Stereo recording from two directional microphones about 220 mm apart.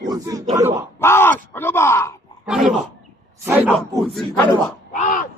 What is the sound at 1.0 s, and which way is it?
Speech, 10° left (ahead or behind).